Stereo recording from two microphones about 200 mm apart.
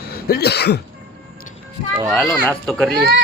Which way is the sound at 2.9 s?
55° right (ahead or behind).